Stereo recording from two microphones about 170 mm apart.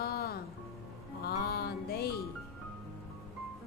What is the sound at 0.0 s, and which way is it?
Music, 65° left (ahead or behind).